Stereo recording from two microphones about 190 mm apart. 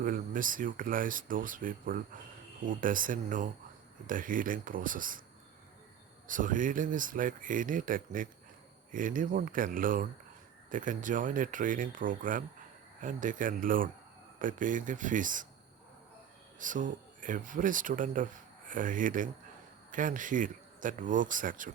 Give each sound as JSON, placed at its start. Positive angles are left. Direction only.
{"t": 0.0, "sound": "speech", "side_deg": -45}
{"t": 6.2, "sound": "speech", "side_deg": -45}
{"t": 16.6, "sound": "speech", "side_deg": -45}